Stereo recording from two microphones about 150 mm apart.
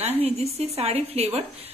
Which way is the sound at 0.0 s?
45° right (ahead or behind).